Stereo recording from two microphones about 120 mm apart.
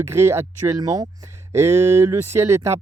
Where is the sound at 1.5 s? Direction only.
20° right (ahead or behind).